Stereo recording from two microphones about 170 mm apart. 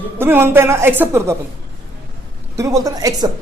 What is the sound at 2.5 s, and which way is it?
Speech, 20° right (ahead or behind).